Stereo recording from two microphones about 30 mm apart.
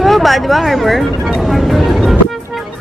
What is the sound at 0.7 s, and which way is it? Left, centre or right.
Speech, centre.